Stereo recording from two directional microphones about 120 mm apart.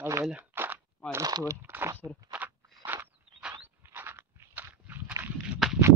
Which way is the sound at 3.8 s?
20° right (ahead or behind).